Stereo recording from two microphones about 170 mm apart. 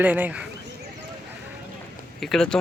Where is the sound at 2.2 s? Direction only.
5° left (ahead or behind).